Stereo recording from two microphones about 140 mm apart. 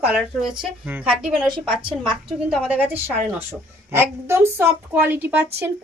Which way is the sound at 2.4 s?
5° right (ahead or behind).